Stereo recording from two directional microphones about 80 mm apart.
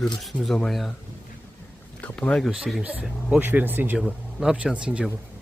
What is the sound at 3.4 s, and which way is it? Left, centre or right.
Speech, right.